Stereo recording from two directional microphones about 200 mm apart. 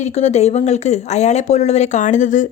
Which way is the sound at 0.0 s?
35° left (ahead or behind).